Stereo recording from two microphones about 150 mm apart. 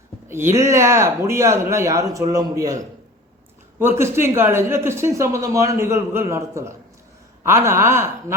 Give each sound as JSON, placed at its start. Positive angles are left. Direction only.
{"t": 0.3, "sound": "speech", "side_deg": -15}
{"t": 3.8, "sound": "a man's voice", "side_deg": -15}